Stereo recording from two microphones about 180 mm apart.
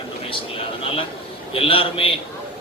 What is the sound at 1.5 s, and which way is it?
Speech, 30° left (ahead or behind).